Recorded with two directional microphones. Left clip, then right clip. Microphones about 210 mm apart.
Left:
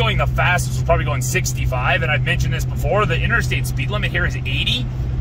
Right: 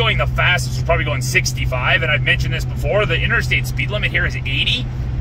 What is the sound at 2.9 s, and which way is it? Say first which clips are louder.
Speech: right 1 dB; 10° left (ahead or behind).